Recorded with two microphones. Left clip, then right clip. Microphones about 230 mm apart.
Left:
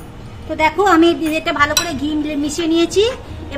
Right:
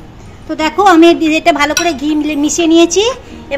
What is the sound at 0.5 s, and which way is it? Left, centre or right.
Speech, right.